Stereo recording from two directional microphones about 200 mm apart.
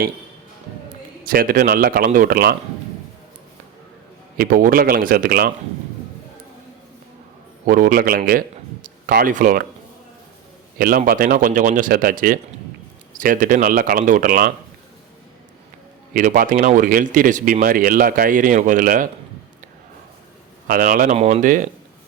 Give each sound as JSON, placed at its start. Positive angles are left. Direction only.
{"t": 1.3, "sound": "speech", "side_deg": -45}
{"t": 4.4, "sound": "speech", "side_deg": -45}
{"t": 7.7, "sound": "a man's voice", "side_deg": -45}
{"t": 10.8, "sound": "speech", "side_deg": -45}
{"t": 16.1, "sound": "speech", "side_deg": -45}
{"t": 20.7, "sound": "speech", "side_deg": -45}